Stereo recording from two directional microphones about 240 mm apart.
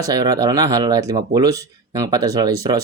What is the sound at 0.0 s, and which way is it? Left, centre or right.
Speech, centre.